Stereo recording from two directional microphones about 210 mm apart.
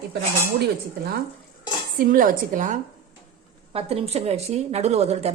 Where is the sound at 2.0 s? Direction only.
40° right (ahead or behind).